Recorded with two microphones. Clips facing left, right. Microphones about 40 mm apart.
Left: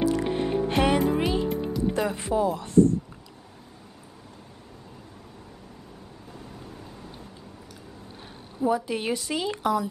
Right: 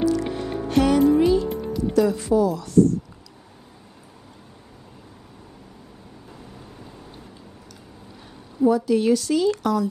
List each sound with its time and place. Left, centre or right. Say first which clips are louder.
0.0 s music: right 2 dB; left
2.0 s a woman's voice: right 9 dB; left
8.6 s a woman's voice: right 7 dB; left